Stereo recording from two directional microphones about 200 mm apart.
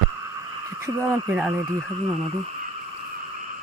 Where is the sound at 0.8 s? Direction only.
15° right (ahead or behind).